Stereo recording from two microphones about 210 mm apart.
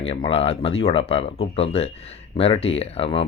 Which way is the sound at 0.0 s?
25° left (ahead or behind).